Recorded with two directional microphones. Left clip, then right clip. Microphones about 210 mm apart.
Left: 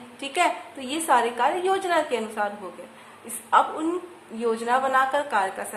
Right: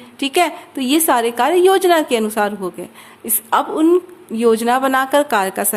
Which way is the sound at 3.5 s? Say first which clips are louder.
Right 7 dB; 45° right (ahead or behind).